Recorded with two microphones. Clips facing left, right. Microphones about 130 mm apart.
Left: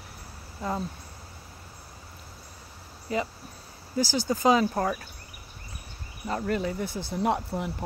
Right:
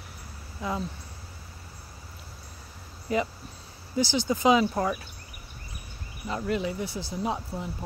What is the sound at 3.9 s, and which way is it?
Speech, 40° left (ahead or behind).